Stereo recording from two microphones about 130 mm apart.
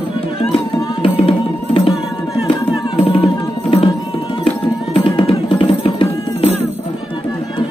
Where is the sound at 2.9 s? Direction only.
45° left (ahead or behind).